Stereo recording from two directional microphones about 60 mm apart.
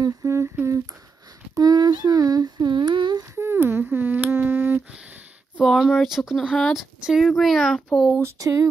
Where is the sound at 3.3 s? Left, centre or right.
Right.